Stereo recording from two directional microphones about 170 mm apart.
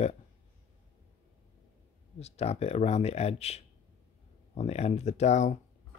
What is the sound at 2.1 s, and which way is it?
Speech, 40° left (ahead or behind).